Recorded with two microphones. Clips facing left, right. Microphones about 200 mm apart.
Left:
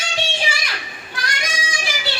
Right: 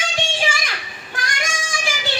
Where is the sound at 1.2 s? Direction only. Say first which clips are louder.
Even; 50° right (ahead or behind).